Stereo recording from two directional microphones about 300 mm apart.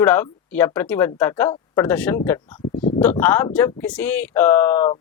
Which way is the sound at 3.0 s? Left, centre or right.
Centre.